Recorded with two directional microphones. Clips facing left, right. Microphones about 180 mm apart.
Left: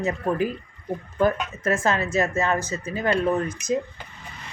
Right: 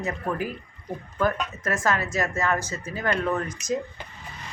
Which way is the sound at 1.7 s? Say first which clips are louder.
Left 3 dB; 20° left (ahead or behind).